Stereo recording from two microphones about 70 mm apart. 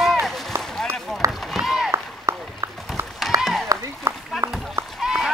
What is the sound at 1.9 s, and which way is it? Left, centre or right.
Run, right.